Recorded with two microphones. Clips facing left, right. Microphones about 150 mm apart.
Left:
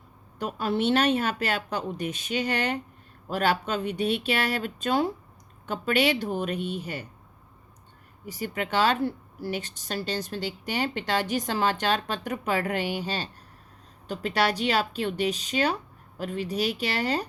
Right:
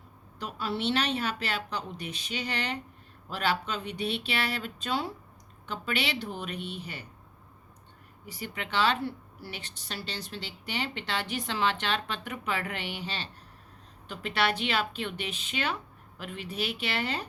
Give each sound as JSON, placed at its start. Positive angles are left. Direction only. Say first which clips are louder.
{"t": 0.3, "sound": "a woman's voice", "louder": "left 6 dB", "side_deg": 50}
{"t": 8.3, "sound": "a woman's voice", "louder": "left 6 dB", "side_deg": 45}